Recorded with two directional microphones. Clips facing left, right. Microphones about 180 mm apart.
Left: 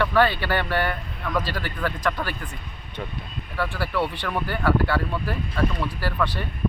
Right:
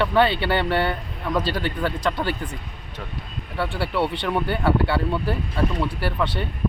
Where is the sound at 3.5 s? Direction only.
25° right (ahead or behind).